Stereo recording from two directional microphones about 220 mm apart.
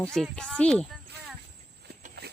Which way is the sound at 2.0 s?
45° right (ahead or behind).